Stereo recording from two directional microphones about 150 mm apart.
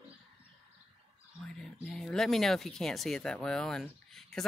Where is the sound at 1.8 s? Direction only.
5° left (ahead or behind).